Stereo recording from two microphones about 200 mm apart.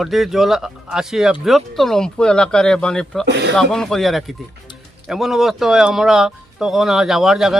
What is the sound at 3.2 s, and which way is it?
Speech, 60° right (ahead or behind).